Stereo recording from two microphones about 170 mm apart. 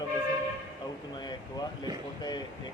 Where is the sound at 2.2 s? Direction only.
25° left (ahead or behind).